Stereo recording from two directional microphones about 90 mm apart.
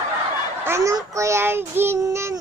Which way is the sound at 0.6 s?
35° right (ahead or behind).